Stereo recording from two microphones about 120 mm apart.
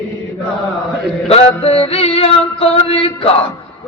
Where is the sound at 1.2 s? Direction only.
55° left (ahead or behind).